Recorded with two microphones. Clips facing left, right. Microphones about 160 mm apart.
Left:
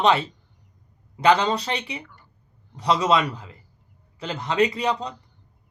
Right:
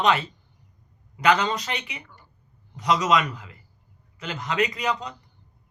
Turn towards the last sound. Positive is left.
turn(degrees=30)  # may be behind; listen again after turning